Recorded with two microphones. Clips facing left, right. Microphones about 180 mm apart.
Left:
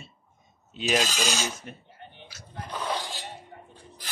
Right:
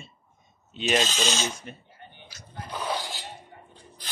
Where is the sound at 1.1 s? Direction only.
25° right (ahead or behind).